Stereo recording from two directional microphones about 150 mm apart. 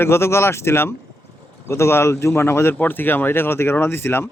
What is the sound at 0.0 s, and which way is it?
Speech, 15° left (ahead or behind).